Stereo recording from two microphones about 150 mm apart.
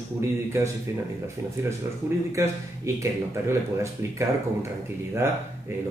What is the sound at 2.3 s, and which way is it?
Speech, 20° right (ahead or behind).